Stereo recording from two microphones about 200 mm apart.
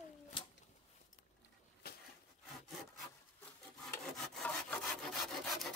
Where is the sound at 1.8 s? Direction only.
50° left (ahead or behind).